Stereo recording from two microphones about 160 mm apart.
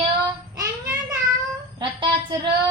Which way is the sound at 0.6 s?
20° right (ahead or behind).